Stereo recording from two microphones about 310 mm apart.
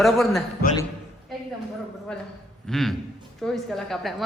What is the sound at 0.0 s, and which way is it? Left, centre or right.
Speech, centre.